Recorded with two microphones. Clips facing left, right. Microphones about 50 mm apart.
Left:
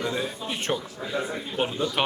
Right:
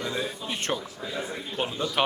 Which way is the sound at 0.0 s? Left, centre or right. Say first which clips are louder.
Left 2 dB; centre.